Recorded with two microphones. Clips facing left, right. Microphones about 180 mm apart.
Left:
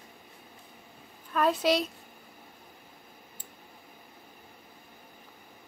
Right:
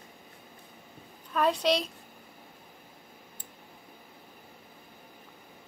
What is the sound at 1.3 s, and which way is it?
Speech, centre (ahead or behind).